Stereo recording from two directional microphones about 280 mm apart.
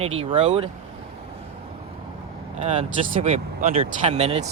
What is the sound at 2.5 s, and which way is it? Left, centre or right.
Speech, right.